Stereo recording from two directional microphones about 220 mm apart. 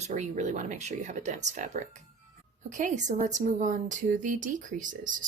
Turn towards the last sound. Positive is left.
turn(degrees=-35)  # may be behind; listen again after turning